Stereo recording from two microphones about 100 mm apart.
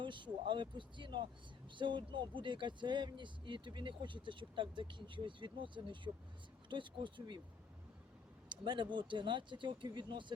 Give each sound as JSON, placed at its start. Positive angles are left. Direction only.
{"t": 0.0, "sound": "speech", "side_deg": -55}
{"t": 8.4, "sound": "speech", "side_deg": -50}